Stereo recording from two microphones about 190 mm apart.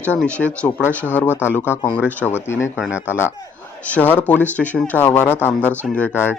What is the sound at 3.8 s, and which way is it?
Speech, 10° left (ahead or behind).